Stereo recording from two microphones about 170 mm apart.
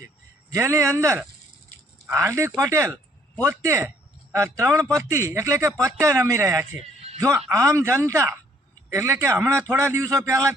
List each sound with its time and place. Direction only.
0.5 s speech: 20° right (ahead or behind)